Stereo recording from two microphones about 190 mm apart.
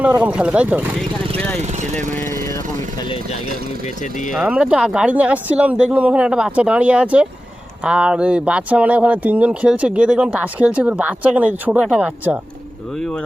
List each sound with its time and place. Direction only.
0.1 s speech: 5° right (ahead or behind)
1.6 s speech: 35° right (ahead or behind)
2.1 s speech: 15° left (ahead or behind)
4.0 s speech: 40° left (ahead or behind)
4.4 s speech: 5° right (ahead or behind)
13.0 s speech: 5° left (ahead or behind)